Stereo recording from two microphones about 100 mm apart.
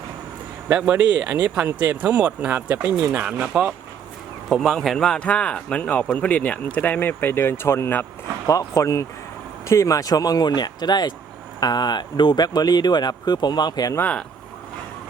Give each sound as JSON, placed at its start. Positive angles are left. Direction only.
{"t": 0.7, "sound": "speech", "side_deg": -10}
{"t": 8.4, "sound": "speech", "side_deg": 35}
{"t": 14.0, "sound": "speech", "side_deg": 10}